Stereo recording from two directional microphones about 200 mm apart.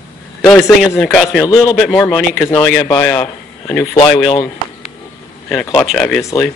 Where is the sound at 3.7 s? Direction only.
10° left (ahead or behind).